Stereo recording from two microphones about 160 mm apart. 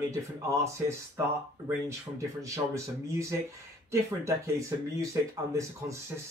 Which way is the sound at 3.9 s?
20° right (ahead or behind).